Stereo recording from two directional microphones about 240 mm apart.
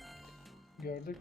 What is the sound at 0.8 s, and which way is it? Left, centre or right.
Speech, left.